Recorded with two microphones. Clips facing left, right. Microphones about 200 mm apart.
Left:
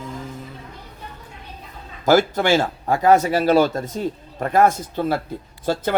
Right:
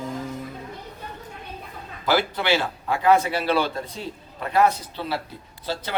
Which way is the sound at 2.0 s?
45° left (ahead or behind).